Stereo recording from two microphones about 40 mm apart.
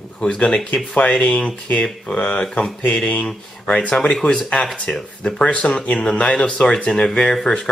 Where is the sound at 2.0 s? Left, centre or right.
Left.